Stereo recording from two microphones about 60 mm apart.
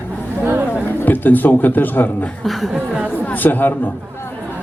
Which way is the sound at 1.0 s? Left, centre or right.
Left.